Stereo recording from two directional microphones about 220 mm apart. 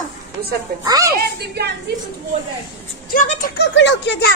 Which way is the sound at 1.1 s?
50° right (ahead or behind).